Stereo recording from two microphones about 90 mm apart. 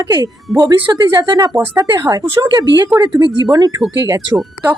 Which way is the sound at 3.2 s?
25° right (ahead or behind).